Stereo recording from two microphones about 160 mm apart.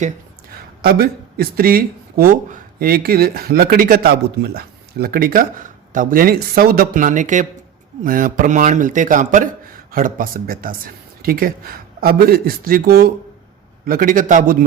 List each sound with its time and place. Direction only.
0.8 s a man's voice: 70° right (ahead or behind)